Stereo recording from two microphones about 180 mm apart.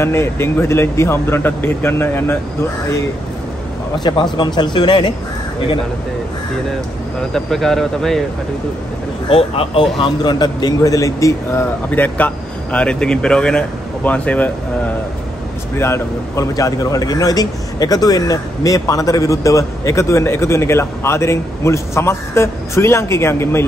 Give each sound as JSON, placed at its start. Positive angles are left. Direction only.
{"t": 0.0, "sound": "a man's voice", "side_deg": 15}
{"t": 7.3, "sound": "speech", "side_deg": 0}
{"t": 9.3, "sound": "a man's voice", "side_deg": 30}
{"t": 15.8, "sound": "a man's voice", "side_deg": 15}